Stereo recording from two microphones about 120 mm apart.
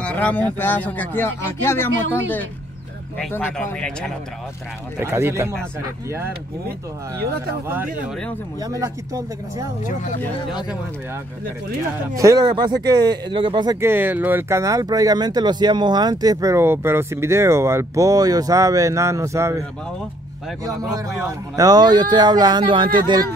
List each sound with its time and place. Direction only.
0.0 s speech: 15° left (ahead or behind)
3.3 s speech: 15° left (ahead or behind)
4.9 s speech: 20° right (ahead or behind)
7.6 s speech: 15° right (ahead or behind)
8.5 s speech: 30° right (ahead or behind)
12.2 s speech: 30° right (ahead or behind)
13.7 s speech: 20° right (ahead or behind)
21.3 s speech: 30° right (ahead or behind)